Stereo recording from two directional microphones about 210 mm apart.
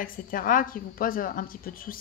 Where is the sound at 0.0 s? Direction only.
40° left (ahead or behind).